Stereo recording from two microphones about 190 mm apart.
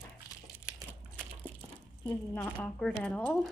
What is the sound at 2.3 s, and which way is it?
Speech, 10° left (ahead or behind).